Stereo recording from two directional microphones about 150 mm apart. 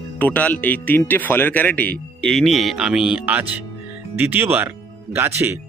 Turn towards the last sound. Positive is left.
turn(degrees=-15)  # may be behind; listen again after turning